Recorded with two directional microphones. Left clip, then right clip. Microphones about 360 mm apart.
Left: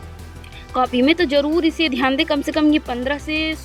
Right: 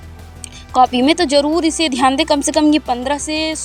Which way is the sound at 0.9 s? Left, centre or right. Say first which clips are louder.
Right 3 dB; right.